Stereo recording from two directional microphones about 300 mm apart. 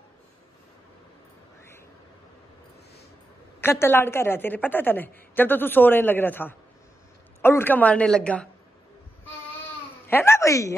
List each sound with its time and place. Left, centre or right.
3.6 s a woman's voice: centre
10.0 s speech: centre